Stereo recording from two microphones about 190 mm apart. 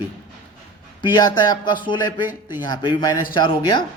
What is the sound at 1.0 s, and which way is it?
A man's voice, 20° left (ahead or behind).